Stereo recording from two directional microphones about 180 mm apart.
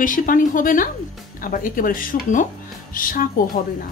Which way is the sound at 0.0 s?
50° left (ahead or behind).